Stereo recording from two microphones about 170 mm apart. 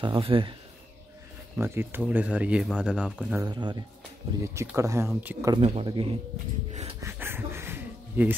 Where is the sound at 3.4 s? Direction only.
25° right (ahead or behind).